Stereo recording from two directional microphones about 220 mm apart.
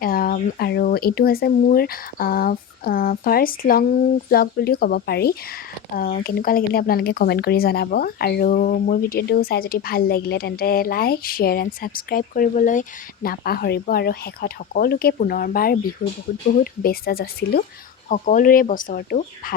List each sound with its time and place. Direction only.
0.0 s speech: 40° left (ahead or behind)